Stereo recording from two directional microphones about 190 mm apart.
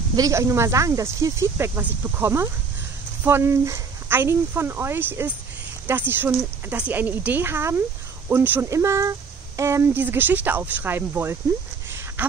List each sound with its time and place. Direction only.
0.1 s speech: 15° right (ahead or behind)